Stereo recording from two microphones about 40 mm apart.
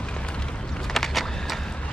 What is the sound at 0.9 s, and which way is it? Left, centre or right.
Vehicle, centre.